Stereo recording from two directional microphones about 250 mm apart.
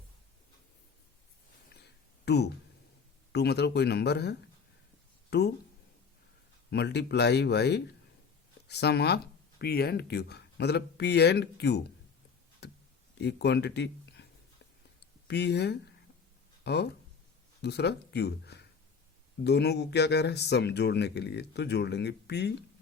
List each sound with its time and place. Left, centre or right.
1.7 s a sound: left
3.3 s speech: left
6.7 s speech: left
12.6 s a sound: left
13.1 s speech: left
15.3 s speech: left